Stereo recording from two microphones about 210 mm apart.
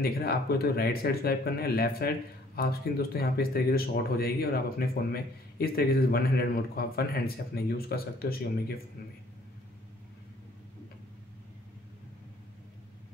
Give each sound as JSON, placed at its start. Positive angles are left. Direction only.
{"t": 0.0, "sound": "speech", "side_deg": 45}